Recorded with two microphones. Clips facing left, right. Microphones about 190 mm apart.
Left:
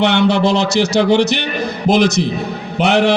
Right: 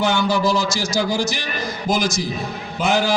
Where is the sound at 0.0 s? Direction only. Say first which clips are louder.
Left 5 dB; 70° left (ahead or behind).